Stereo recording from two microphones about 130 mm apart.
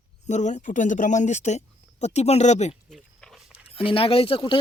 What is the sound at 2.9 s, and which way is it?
Walk, centre (ahead or behind).